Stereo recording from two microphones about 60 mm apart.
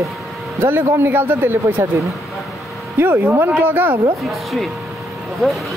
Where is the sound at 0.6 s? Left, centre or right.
Right.